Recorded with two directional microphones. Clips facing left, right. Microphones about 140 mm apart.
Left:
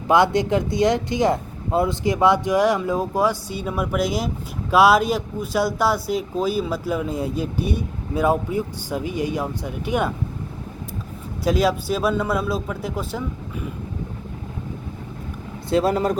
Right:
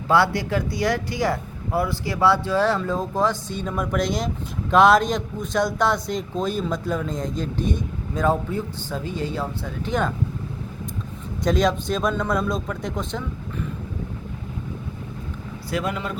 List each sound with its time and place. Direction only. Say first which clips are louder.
0.1 s speech: left 3 dB; 20° left (ahead or behind)
11.4 s speech: left 1 dB; 5° left (ahead or behind)
15.7 s speech: left 8 dB; 35° left (ahead or behind)